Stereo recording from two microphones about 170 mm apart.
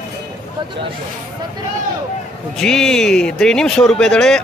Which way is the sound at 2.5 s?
5° left (ahead or behind).